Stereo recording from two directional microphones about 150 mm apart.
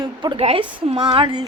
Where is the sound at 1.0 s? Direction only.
30° right (ahead or behind).